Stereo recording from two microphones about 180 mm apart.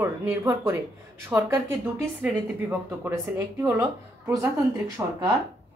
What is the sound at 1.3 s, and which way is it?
A woman's voice, 15° right (ahead or behind).